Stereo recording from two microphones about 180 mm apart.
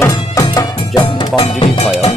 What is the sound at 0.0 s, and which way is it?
Music, 20° left (ahead or behind).